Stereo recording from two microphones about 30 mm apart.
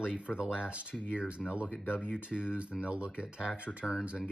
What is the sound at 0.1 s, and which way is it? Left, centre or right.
Speech, right.